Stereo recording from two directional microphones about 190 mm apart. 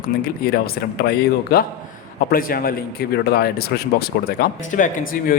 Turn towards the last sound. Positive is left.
turn(degrees=45)  # may be behind; listen again after turning